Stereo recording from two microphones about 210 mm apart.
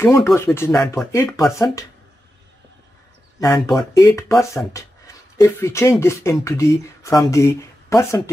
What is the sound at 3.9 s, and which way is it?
Speech, 15° left (ahead or behind).